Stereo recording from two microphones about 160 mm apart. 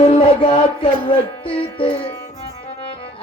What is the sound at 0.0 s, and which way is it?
Music, 35° left (ahead or behind).